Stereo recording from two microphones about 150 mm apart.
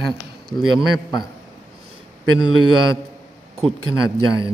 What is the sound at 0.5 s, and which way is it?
Speech, 25° left (ahead or behind).